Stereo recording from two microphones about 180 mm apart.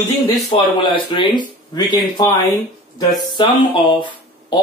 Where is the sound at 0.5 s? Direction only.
25° left (ahead or behind).